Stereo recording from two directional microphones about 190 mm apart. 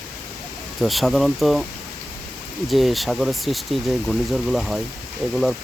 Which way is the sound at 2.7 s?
Centre (ahead or behind).